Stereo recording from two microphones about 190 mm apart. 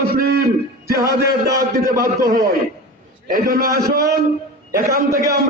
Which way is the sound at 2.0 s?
50° right (ahead or behind).